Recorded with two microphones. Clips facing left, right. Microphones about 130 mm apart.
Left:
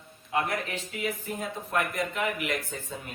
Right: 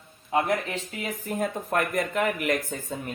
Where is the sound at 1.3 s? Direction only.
50° right (ahead or behind).